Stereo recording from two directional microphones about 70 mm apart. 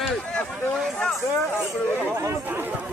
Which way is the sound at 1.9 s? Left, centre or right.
Right.